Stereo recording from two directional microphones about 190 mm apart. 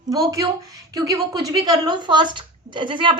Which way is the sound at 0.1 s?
20° right (ahead or behind).